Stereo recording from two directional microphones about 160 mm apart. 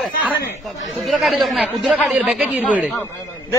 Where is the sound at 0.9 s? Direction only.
Centre (ahead or behind).